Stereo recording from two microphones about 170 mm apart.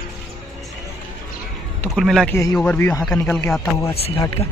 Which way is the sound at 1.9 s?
Centre (ahead or behind).